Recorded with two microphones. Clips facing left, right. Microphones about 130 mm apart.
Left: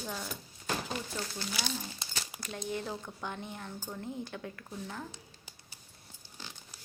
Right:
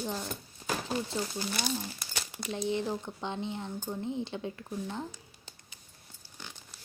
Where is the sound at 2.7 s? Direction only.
20° right (ahead or behind).